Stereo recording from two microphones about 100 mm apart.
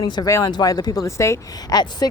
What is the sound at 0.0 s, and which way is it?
Speech, 45° left (ahead or behind).